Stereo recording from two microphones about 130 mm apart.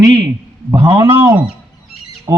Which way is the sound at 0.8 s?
35° right (ahead or behind).